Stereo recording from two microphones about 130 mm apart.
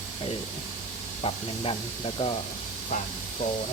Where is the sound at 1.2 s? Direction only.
50° left (ahead or behind).